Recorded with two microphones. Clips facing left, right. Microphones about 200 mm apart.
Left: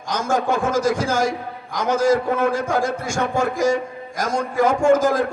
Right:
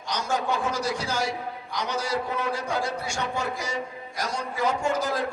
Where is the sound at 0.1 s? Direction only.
50° left (ahead or behind).